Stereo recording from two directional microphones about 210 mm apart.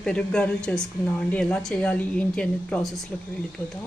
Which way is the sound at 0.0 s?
5° left (ahead or behind).